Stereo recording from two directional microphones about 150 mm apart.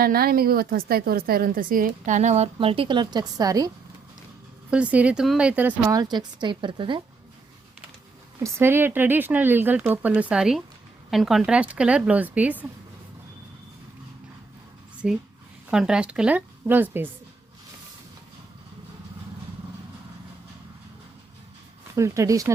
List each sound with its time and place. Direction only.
0.0 s a woman's voice: 85° right; by 3.7 s 25° right (ahead or behind)
4.7 s speech: 10° right (ahead or behind)
5.9 s a woman's voice: 25° right (ahead or behind)
8.4 s speech: 15° right (ahead or behind)
15.0 s speech: 5° right (ahead or behind)
21.9 s speech: 20° right (ahead or behind)